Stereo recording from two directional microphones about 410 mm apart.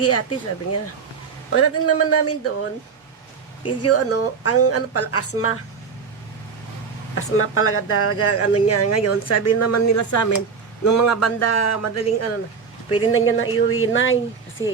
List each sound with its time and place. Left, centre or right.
0.0 s speech: left
3.8 s speech: left
7.2 s speech: left